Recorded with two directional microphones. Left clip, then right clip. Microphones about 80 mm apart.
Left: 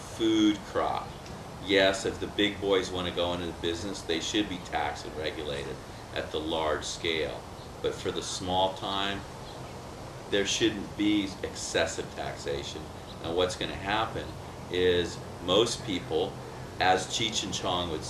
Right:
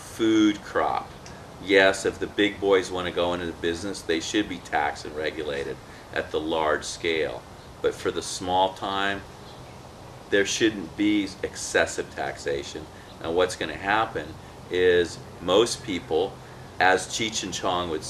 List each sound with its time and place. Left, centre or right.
0.2 s speech: right
10.3 s speech: right